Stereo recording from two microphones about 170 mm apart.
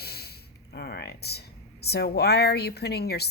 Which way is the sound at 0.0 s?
70° left (ahead or behind).